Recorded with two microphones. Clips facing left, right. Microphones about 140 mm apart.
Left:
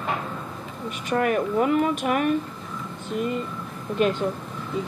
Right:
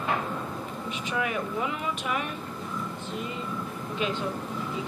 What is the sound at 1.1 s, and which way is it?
A woman's voice, 50° left (ahead or behind).